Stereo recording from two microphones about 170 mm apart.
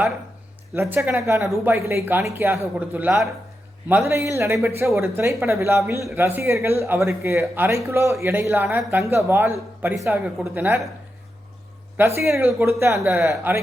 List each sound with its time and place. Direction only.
0.8 s speech: 10° right (ahead or behind)
11.9 s speech: 15° right (ahead or behind)